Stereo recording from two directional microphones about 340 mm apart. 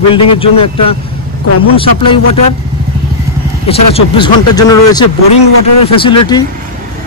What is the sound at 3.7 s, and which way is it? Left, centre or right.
A man's voice, centre.